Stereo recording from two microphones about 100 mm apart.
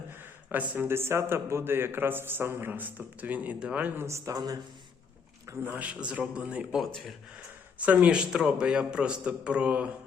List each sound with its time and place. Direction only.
0.1 s a sound: 20° right (ahead or behind)
0.7 s a man's voice: 25° right (ahead or behind)
4.0 s a man's voice: 30° right (ahead or behind)
5.6 s a man's voice: 15° right (ahead or behind)